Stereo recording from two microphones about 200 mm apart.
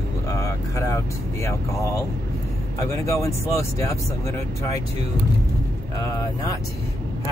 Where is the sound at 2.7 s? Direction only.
15° left (ahead or behind).